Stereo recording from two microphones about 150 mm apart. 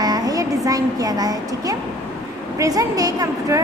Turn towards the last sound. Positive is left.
turn(degrees=-20)  # may be behind; listen again after turning